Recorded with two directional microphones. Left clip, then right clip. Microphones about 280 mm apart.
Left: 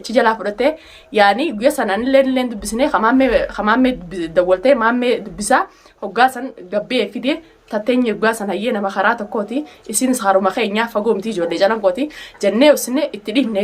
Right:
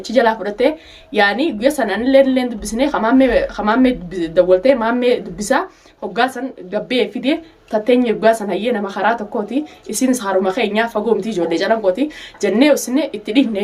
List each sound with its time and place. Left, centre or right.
0.1 s speech: centre